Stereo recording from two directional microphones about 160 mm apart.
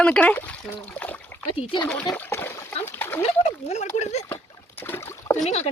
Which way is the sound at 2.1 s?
10° left (ahead or behind).